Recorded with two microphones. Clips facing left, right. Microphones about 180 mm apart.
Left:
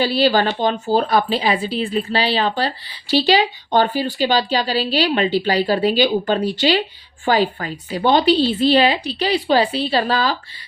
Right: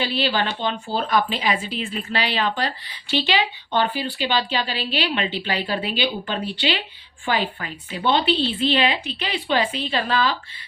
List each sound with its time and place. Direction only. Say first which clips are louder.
0.0 s speech: left 7 dB; 40° left (ahead or behind)